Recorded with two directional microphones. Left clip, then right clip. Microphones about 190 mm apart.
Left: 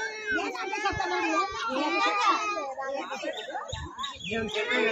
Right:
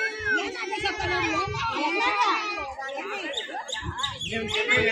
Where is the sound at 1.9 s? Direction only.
50° left (ahead or behind).